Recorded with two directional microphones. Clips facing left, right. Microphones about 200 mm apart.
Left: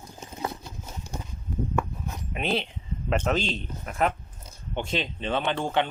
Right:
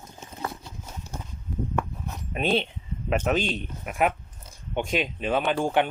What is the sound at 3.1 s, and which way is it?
Speech, 15° right (ahead or behind).